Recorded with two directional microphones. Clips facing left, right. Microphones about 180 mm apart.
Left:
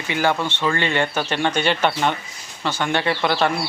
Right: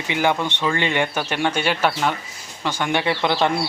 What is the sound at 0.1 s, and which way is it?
A man's voice, 15° right (ahead or behind).